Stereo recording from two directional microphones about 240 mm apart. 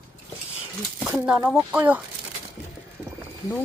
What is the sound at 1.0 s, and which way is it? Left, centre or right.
Speech, centre.